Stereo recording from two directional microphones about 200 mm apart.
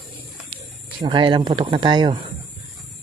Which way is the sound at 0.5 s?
25° right (ahead or behind).